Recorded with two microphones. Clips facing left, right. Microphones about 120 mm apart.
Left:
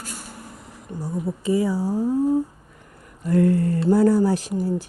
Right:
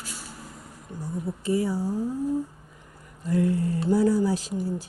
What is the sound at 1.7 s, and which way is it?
Speech, 85° left.